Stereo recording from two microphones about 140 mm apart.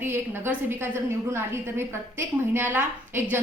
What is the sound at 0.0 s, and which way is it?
A woman's voice, 15° right (ahead or behind).